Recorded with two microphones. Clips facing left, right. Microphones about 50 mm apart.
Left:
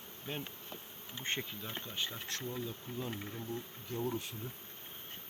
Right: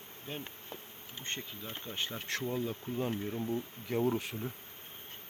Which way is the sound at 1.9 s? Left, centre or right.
Right.